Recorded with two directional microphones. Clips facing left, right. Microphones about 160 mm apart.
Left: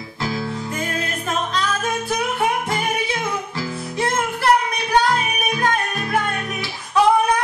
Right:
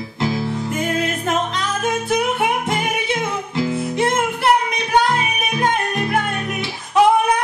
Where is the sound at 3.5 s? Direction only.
20° right (ahead or behind).